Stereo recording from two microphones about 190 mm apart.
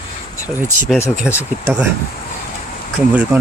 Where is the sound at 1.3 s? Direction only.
5° right (ahead or behind).